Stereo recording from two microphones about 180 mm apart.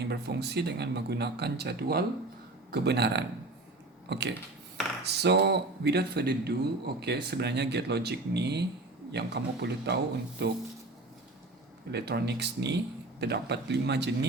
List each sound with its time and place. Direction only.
0.0 s speech: 65° right (ahead or behind)
11.9 s speech: 65° right (ahead or behind)